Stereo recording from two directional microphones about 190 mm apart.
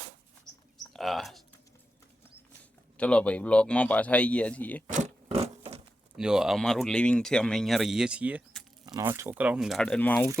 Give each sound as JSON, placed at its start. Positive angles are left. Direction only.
{"t": 0.9, "sound": "speech", "side_deg": 0}
{"t": 3.0, "sound": "speech", "side_deg": 5}
{"t": 4.9, "sound": "a sound", "side_deg": -40}
{"t": 6.1, "sound": "speech", "side_deg": -5}
{"t": 8.9, "sound": "speech", "side_deg": -20}